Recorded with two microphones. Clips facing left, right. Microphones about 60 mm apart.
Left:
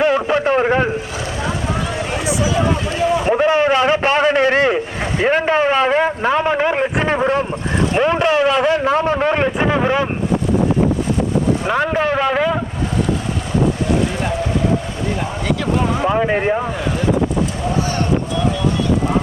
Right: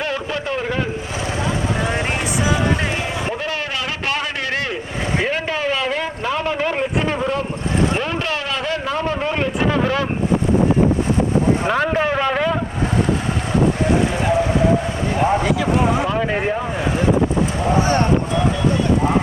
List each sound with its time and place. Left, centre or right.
0.0 s a sound: left
2.0 s a sound: right
3.2 s a sound: left
5.2 s a man's voice: left
8.8 s a man's voice: left
11.7 s a man's voice: centre
15.4 s speech: centre
16.0 s speech: centre
17.7 s speech: right